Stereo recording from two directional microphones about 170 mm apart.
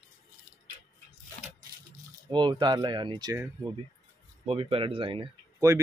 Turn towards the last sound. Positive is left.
turn(degrees=-30)  # may be behind; listen again after turning